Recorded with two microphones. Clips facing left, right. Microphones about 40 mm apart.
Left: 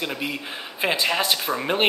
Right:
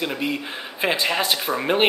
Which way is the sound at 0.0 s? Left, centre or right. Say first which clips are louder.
Right 3 dB; centre.